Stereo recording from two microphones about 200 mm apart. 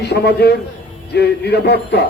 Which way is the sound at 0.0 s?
55° left (ahead or behind).